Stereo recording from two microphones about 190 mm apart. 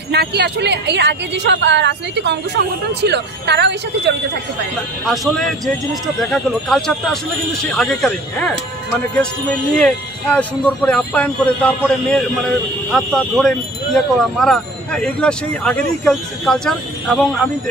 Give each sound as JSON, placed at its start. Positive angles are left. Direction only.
{"t": 0.1, "sound": "a woman's voice", "side_deg": -60}
{"t": 5.0, "sound": "speech", "side_deg": 0}
{"t": 9.8, "sound": "speech", "side_deg": 5}